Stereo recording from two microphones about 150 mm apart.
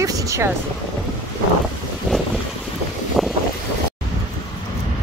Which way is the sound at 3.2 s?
Centre (ahead or behind).